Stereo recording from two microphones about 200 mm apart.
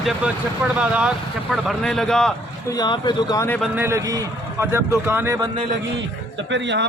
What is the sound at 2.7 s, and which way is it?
Speech, 20° left (ahead or behind).